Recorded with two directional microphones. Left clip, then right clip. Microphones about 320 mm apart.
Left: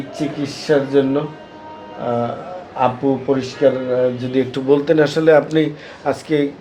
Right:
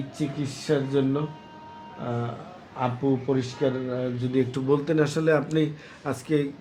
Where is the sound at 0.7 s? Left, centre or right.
Right.